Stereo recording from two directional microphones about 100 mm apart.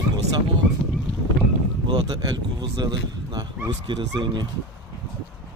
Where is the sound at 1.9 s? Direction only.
45° right (ahead or behind).